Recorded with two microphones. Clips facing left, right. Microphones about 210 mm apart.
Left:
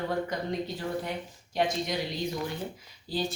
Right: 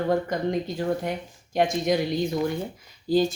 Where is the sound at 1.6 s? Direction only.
50° right (ahead or behind).